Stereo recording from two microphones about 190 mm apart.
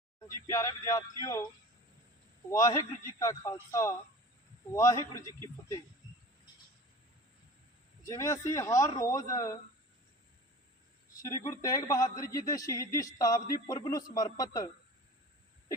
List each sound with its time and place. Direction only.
0.4 s speech: 15° left (ahead or behind)
2.5 s speech: 20° left (ahead or behind)
8.0 s speech: 15° left (ahead or behind)
11.2 s a man's voice: 15° left (ahead or behind)